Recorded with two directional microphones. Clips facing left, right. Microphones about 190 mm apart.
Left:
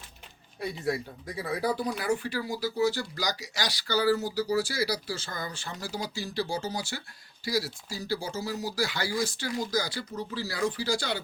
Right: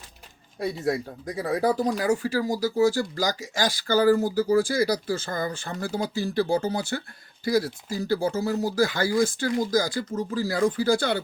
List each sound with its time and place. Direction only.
0.6 s speech: 45° right (ahead or behind)